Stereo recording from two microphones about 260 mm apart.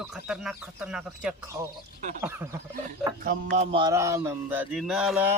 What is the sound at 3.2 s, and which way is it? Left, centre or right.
Music, right.